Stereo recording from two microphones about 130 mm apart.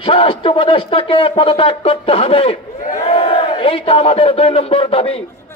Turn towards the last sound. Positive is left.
turn(degrees=45)  # may be behind; listen again after turning